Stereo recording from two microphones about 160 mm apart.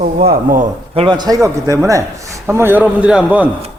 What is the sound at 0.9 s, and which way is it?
A man's voice, 30° right (ahead or behind).